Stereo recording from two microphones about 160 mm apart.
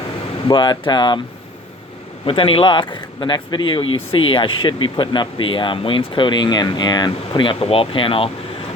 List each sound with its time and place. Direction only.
0.4 s speech: 25° left (ahead or behind)
2.2 s speech: 35° left (ahead or behind)